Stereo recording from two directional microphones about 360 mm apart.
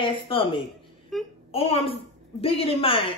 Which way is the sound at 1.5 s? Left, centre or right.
Centre.